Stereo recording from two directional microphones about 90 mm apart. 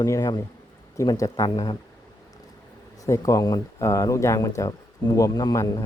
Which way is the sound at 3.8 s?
35° left (ahead or behind).